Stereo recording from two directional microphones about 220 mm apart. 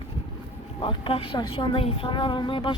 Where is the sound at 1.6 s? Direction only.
25° left (ahead or behind).